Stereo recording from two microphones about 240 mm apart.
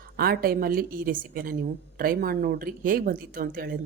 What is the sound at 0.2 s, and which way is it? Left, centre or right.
Speech, right.